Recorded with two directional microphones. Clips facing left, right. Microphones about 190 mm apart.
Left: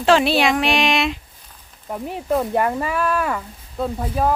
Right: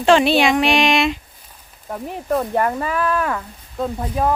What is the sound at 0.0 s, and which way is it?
Speech, centre (ahead or behind).